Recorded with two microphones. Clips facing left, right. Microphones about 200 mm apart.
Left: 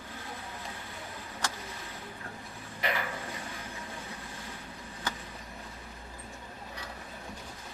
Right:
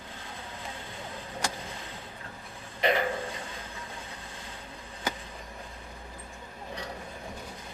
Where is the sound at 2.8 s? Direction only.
25° right (ahead or behind).